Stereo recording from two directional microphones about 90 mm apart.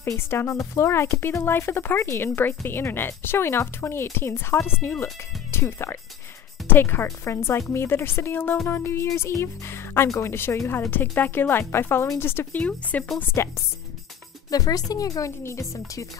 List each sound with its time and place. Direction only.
0.1 s speech: 25° left (ahead or behind)
13.3 s speech: 30° left (ahead or behind)
14.5 s speech: 45° left (ahead or behind)